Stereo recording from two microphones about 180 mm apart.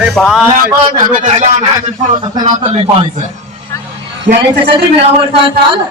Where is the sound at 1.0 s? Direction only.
45° right (ahead or behind).